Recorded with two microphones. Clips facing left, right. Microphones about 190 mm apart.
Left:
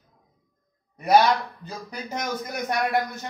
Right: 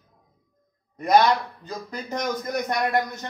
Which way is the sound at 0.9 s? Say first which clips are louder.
Even; 10° left (ahead or behind).